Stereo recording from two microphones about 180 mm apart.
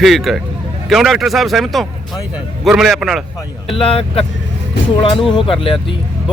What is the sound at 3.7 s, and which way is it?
Speech, 30° left (ahead or behind).